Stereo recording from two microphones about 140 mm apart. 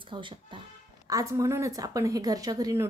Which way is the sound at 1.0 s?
25° right (ahead or behind).